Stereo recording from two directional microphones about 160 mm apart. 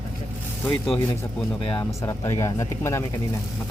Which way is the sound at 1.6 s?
35° left (ahead or behind).